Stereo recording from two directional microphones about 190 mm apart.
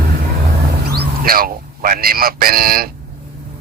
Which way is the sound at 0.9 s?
55° right (ahead or behind).